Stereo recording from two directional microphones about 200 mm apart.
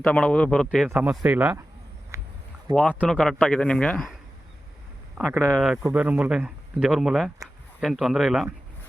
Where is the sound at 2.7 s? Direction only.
20° right (ahead or behind).